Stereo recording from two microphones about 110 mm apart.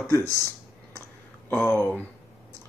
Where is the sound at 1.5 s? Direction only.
20° left (ahead or behind).